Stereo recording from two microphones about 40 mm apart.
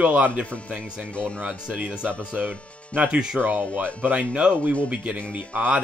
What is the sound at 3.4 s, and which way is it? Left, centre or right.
Speech, centre.